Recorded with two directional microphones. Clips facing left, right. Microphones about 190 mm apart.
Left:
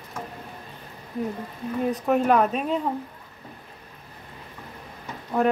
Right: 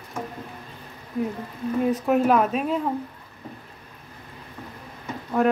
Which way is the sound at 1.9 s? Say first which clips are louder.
Left 1 dB; centre (ahead or behind).